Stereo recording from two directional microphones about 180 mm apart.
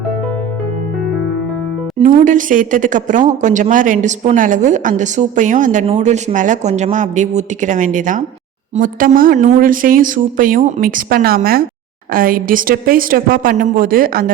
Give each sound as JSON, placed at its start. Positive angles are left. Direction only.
{"t": 2.0, "sound": "a woman's voice", "side_deg": -45}